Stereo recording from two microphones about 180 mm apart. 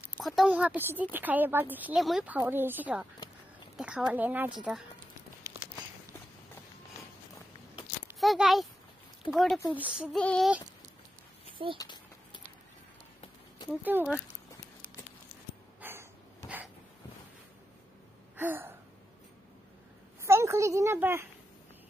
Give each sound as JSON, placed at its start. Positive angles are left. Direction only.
{"t": 0.2, "sound": "a woman's voice", "side_deg": 0}
{"t": 4.6, "sound": "child singing", "side_deg": 0}
{"t": 8.2, "sound": "speech", "side_deg": 0}
{"t": 9.3, "sound": "child singing", "side_deg": 0}
{"t": 11.5, "sound": "a sound", "side_deg": -30}
{"t": 13.8, "sound": "a woman's voice", "side_deg": -10}
{"t": 15.8, "sound": "a sound", "side_deg": -10}
{"t": 18.3, "sound": "gasp", "side_deg": -10}
{"t": 20.2, "sound": "a woman's voice", "side_deg": -15}